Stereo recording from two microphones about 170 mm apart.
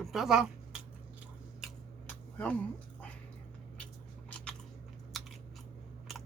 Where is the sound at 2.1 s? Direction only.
10° left (ahead or behind).